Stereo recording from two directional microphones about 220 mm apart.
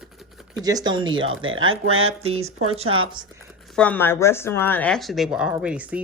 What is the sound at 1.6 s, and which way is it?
Speech, 70° right (ahead or behind).